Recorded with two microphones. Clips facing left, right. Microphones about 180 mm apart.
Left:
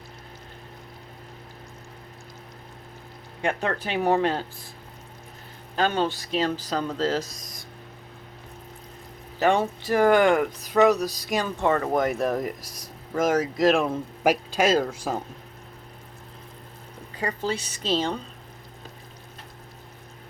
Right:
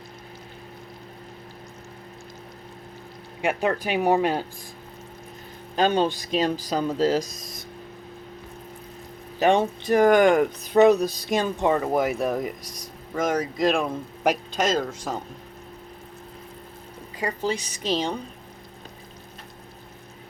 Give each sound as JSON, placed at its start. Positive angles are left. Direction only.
{"t": 3.4, "sound": "speech", "side_deg": -10}
{"t": 5.7, "sound": "speech", "side_deg": -15}
{"t": 9.4, "sound": "speech", "side_deg": -20}
{"t": 17.2, "sound": "speech", "side_deg": -10}